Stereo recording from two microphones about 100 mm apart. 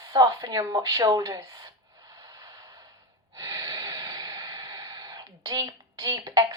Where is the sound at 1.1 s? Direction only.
35° right (ahead or behind).